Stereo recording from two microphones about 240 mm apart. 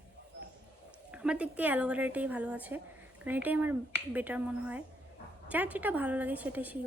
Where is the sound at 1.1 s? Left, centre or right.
Centre.